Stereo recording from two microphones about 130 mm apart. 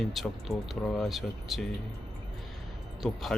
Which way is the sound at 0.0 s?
Centre (ahead or behind).